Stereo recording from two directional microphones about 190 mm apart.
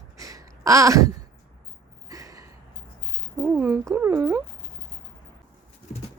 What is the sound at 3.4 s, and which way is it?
Speech, 10° right (ahead or behind).